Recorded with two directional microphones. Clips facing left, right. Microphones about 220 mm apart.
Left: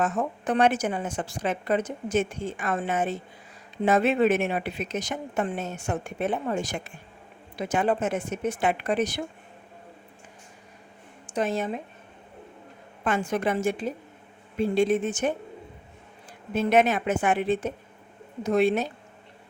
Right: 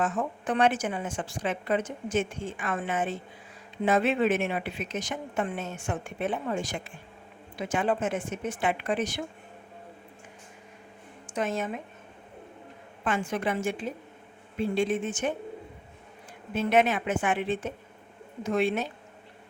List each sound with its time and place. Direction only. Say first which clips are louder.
0.0 s speech: left 2 dB; 40° left (ahead or behind)
11.3 s speech: left 3 dB; 35° left (ahead or behind)
13.1 s speech: left 3 dB; 40° left (ahead or behind)
16.6 s speech: left 2 dB; 40° left (ahead or behind)